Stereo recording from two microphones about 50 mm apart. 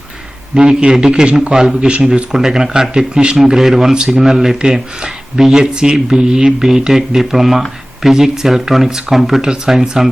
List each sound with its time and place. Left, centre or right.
0.5 s a man's voice: right